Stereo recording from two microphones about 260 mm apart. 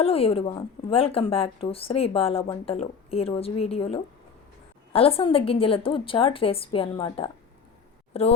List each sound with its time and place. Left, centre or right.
0.0 s a woman's voice: left